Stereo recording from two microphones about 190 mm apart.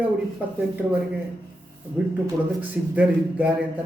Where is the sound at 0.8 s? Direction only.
10° right (ahead or behind).